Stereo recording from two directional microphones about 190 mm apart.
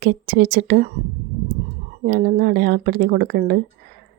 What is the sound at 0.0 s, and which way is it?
Speech, 60° right (ahead or behind).